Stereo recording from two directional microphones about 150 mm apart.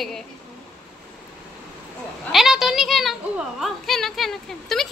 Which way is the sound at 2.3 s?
Centre (ahead or behind).